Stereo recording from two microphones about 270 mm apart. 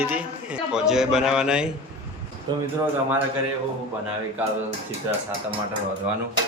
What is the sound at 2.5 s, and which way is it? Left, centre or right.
Speech, centre.